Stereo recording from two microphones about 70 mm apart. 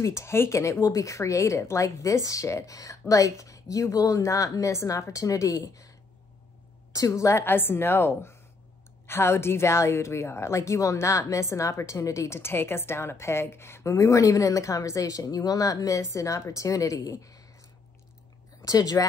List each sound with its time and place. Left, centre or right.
0.0 s a woman's voice: left
7.4 s a woman's voice: left
18.6 s speech: left